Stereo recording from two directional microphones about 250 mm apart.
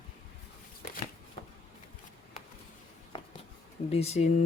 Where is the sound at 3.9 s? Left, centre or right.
Left.